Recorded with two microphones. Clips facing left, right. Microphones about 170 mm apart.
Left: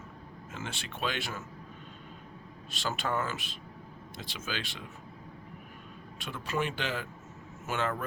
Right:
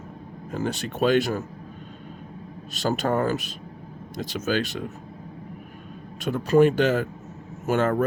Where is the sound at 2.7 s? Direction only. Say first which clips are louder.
Right 9 dB; 40° right (ahead or behind).